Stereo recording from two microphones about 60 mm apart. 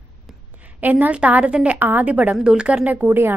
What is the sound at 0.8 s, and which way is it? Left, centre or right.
Speech, right.